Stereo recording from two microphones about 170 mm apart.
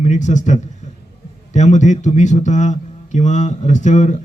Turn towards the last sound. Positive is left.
turn(degrees=45)  # may be behind; listen again after turning